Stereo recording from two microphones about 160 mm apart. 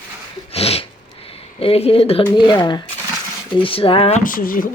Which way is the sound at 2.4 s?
30° left (ahead or behind).